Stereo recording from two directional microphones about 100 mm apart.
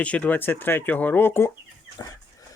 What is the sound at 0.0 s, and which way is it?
Speech, 15° left (ahead or behind).